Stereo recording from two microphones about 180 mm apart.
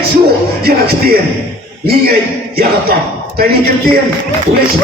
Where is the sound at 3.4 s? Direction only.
60° right (ahead or behind).